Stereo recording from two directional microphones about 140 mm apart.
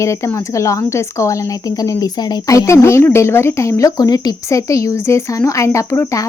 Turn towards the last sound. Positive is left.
turn(degrees=20)  # may be behind; listen again after turning